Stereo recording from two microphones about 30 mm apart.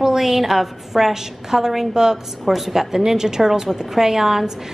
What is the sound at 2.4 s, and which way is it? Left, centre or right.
A woman's voice, centre.